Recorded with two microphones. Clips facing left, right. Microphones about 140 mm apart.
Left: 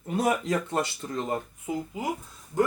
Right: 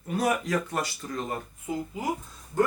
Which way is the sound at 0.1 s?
25° left (ahead or behind).